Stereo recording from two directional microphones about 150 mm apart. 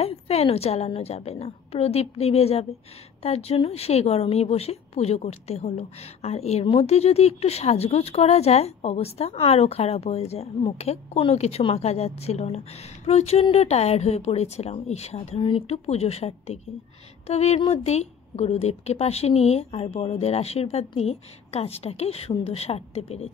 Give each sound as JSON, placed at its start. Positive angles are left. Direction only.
{"t": 0.0, "sound": "speech", "side_deg": 40}